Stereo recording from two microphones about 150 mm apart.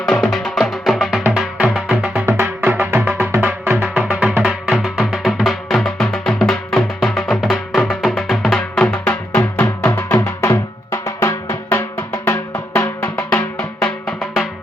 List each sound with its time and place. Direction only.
0.0 s music: centre (ahead or behind)
8.9 s music: 15° left (ahead or behind)
13.6 s music: centre (ahead or behind)